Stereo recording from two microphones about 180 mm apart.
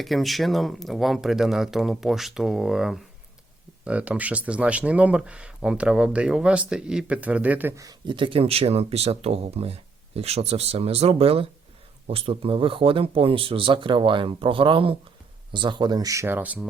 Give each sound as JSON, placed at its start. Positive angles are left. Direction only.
{"t": 0.0, "sound": "speech", "side_deg": 0}
{"t": 7.9, "sound": "speech", "side_deg": -25}